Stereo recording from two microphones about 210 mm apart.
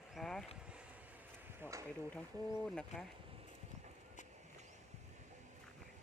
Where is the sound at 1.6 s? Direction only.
15° right (ahead or behind).